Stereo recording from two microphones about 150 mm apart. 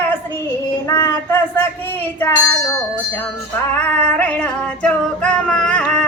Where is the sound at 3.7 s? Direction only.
10° left (ahead or behind).